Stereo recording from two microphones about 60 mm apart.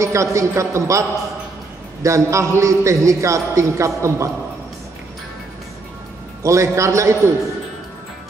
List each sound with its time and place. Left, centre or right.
0.0 s a man's voice: right
2.0 s a man's voice: right
6.4 s a man's voice: right